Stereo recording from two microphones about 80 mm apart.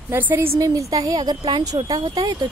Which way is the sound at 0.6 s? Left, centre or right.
Right.